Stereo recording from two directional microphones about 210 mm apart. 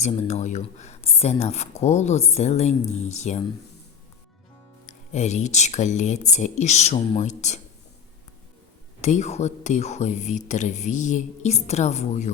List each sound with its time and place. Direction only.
0.0 s speech: 35° left (ahead or behind)
4.9 s speech: 35° left (ahead or behind)
9.0 s speech: 35° left (ahead or behind)